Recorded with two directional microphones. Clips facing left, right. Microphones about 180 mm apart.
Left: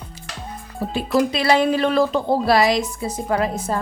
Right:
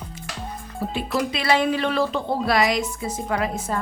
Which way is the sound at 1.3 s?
35° left (ahead or behind).